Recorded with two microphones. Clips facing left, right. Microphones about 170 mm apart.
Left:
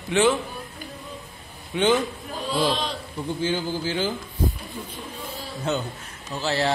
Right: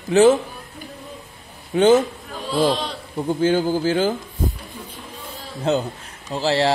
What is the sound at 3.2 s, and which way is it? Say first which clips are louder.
Speech: right 8 dB; 50° right (ahead or behind).